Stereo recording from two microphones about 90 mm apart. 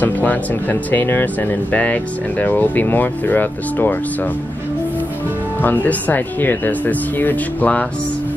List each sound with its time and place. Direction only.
0.0 s speech: 20° left (ahead or behind)
5.6 s speech: 20° left (ahead or behind)